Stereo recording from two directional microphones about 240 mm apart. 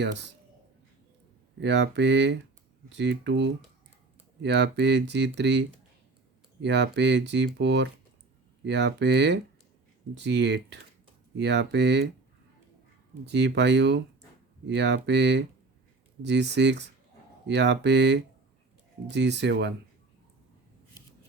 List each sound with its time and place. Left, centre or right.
1.6 s speech: right
13.2 s speech: right